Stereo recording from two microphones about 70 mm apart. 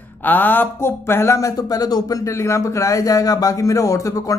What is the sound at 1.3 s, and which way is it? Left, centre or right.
Speech, left.